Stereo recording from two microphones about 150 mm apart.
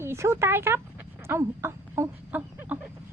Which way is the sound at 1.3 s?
15° right (ahead or behind).